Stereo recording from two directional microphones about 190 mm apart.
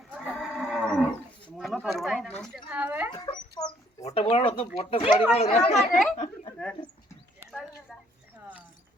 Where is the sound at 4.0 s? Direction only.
30° left (ahead or behind).